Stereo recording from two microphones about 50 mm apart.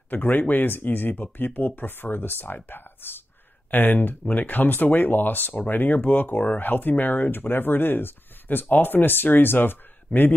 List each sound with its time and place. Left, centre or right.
0.1 s speech: left